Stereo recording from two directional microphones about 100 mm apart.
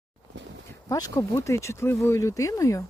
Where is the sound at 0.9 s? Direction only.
35° left (ahead or behind).